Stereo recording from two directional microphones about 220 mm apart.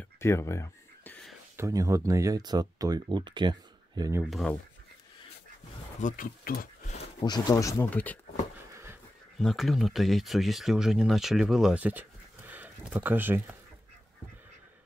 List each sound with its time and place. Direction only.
0.2 s a sound: 10° left (ahead or behind)
1.6 s speech: 15° right (ahead or behind)
4.2 s speech: centre (ahead or behind)
5.9 s speech: 35° left (ahead or behind)
7.2 s speech: 20° left (ahead or behind)
9.4 s speech: centre (ahead or behind)